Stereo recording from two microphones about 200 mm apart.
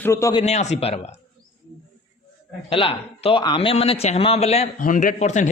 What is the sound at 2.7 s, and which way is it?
A man's voice, 25° left (ahead or behind).